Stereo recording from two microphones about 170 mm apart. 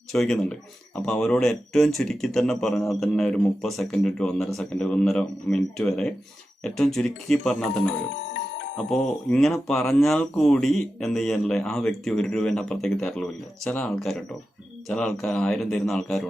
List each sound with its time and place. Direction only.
0.1 s speech: centre (ahead or behind)
8.8 s speech: 5° left (ahead or behind)